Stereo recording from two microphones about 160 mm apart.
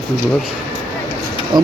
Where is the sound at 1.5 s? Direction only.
25° right (ahead or behind).